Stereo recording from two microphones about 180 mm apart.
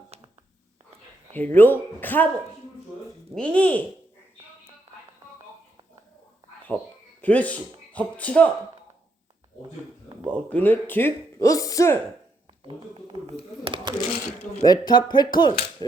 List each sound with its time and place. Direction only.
1.3 s speech: 10° left (ahead or behind)
3.3 s speech: 5° left (ahead or behind)
6.7 s speech: 5° left (ahead or behind)
10.2 s speech: 5° left (ahead or behind)
12.6 s speech: 30° right (ahead or behind)
14.6 s speech: 20° left (ahead or behind)